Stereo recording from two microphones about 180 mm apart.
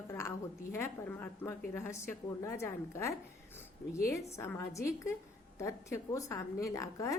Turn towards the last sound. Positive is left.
turn(degrees=15)  # may be behind; listen again after turning